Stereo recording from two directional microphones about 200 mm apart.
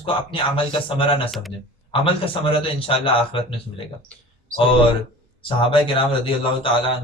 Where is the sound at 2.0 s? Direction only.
25° left (ahead or behind).